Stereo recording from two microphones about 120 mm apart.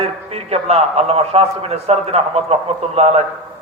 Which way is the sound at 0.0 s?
55° right (ahead or behind).